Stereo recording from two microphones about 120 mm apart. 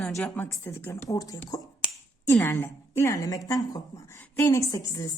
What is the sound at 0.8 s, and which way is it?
Speech, 25° left (ahead or behind).